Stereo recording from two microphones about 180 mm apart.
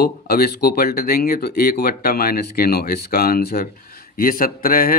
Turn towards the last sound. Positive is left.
turn(degrees=55)  # may be behind; listen again after turning